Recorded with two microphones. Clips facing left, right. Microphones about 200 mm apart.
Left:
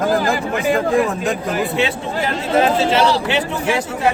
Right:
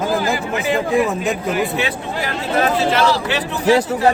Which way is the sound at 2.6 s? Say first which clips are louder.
Left 1 dB; 25° left (ahead or behind).